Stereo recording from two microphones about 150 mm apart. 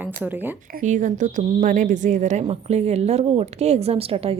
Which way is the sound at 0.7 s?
55° right (ahead or behind).